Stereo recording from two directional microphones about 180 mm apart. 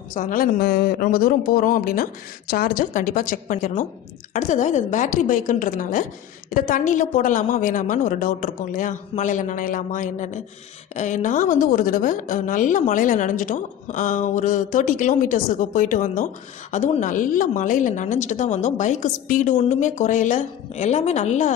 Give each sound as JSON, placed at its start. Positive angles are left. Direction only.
{"t": 0.1, "sound": "a woman's voice", "side_deg": 50}